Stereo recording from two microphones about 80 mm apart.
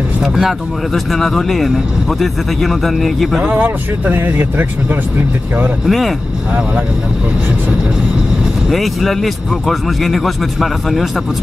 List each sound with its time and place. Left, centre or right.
0.2 s speech: centre
3.4 s speech: centre
5.9 s speech: centre
8.6 s speech: centre